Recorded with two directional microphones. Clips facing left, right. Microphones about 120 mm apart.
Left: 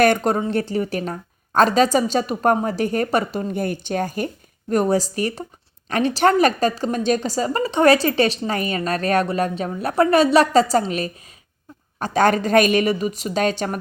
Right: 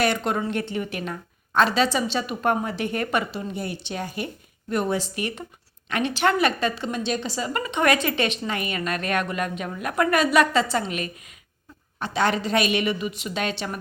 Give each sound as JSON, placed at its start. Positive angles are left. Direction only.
{"t": 0.0, "sound": "a woman's voice", "side_deg": 45}
{"t": 3.5, "sound": "a woman's voice", "side_deg": 50}